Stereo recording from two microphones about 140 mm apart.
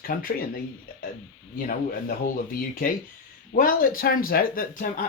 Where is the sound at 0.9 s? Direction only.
90° left.